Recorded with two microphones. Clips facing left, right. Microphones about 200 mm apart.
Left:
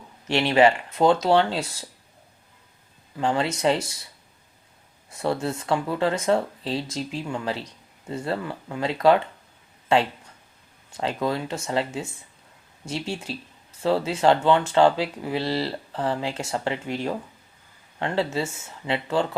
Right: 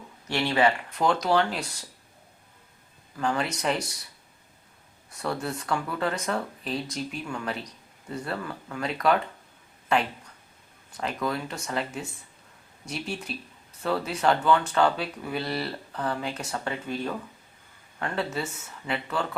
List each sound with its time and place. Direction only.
0.3 s speech: 25° left (ahead or behind)
3.2 s speech: 30° left (ahead or behind)
5.1 s speech: 25° left (ahead or behind)
10.9 s speech: 25° left (ahead or behind)